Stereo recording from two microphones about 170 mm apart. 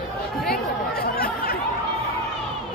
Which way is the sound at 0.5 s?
65° left (ahead or behind).